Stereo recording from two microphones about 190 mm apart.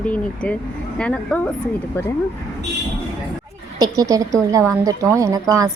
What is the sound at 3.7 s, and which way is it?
A woman's voice, 20° right (ahead or behind).